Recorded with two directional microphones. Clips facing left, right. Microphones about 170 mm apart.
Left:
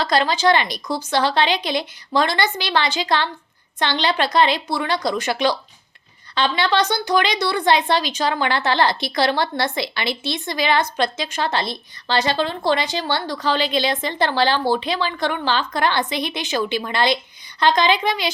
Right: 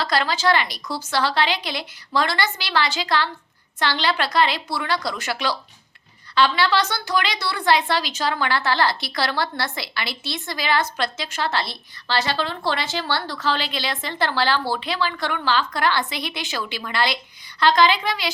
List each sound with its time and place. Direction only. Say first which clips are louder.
0.0 s a woman's voice: left 4 dB; 20° left (ahead or behind)